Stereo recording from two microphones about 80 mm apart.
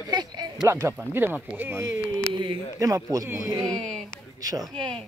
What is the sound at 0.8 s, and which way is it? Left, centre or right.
Speech, right.